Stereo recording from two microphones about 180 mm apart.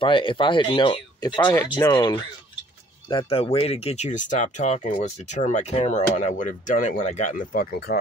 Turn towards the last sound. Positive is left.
turn(degrees=60)  # may be behind; listen again after turning